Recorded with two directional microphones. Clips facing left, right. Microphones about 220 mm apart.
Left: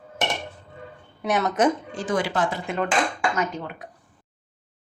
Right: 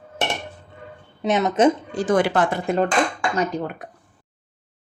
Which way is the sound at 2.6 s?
35° right (ahead or behind).